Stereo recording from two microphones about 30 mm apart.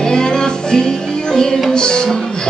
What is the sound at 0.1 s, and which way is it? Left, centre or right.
Music, left.